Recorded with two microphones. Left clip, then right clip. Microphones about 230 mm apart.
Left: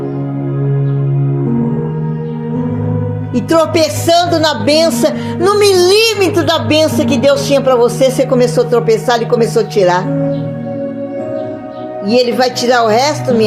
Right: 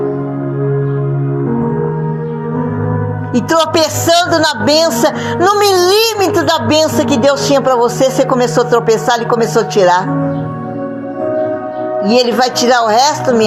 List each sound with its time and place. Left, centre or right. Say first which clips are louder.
3.3 s a woman's voice: even; right
12.0 s a woman's voice: left 1 dB; right